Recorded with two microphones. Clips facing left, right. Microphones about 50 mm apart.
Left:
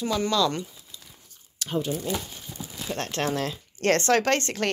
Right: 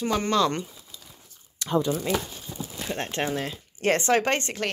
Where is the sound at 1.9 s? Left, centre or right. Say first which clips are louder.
Right 3 dB; right.